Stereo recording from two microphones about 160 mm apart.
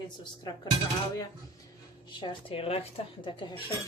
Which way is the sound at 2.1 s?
30° left (ahead or behind).